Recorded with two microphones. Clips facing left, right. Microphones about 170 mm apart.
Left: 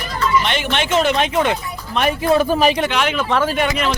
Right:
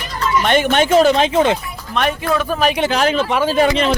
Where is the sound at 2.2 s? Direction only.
30° left (ahead or behind).